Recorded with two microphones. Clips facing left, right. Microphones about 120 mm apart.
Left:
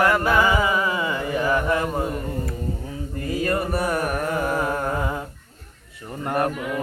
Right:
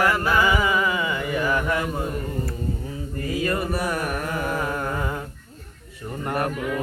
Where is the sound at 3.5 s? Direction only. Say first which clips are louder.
Left 2 dB; 40° left (ahead or behind); by 5.2 s 20° left (ahead or behind).